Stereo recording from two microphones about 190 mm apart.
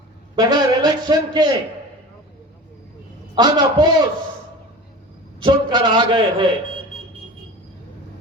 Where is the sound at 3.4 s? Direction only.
20° right (ahead or behind).